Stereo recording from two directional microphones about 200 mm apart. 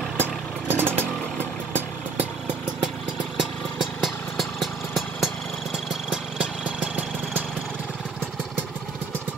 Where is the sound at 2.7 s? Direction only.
5° right (ahead or behind).